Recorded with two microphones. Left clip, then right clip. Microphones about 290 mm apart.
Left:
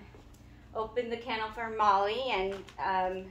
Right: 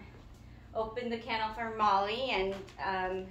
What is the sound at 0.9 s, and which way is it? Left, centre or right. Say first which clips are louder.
A woman's voice: left 2 dB; centre.